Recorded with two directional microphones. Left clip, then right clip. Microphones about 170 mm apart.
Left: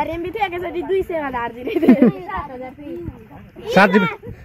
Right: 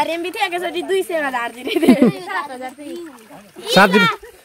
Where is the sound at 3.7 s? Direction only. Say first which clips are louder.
Right 1 dB; 25° right (ahead or behind).